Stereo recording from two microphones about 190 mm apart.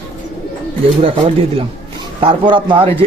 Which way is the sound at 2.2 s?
25° right (ahead or behind).